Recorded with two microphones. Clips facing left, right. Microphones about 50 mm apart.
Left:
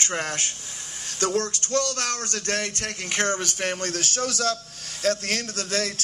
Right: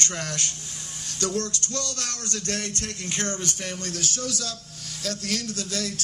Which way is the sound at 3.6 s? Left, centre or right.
Left.